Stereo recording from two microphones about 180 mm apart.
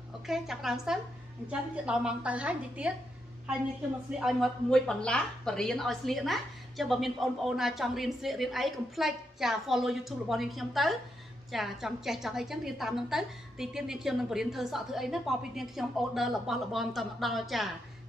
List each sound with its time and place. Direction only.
0.3 s a woman's voice: centre (ahead or behind)
4.2 s a woman's voice: centre (ahead or behind)